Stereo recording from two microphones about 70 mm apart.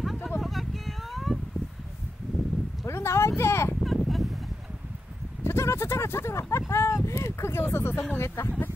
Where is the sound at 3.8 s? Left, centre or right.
Centre.